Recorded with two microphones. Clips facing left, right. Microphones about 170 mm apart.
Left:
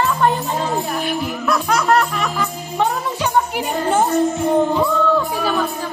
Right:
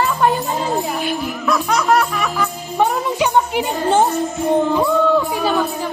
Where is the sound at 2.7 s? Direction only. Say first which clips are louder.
Right 3 dB; 15° right (ahead or behind).